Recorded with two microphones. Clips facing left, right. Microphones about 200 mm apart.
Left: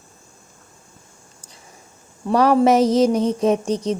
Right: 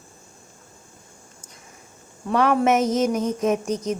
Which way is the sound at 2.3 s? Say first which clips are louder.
Left 4 dB; 35° left (ahead or behind).